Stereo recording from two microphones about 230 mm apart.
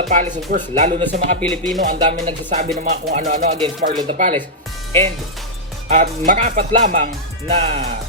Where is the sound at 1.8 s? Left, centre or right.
Right.